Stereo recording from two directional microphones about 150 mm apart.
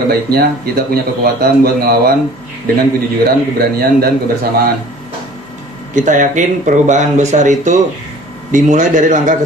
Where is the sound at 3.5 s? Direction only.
90° right.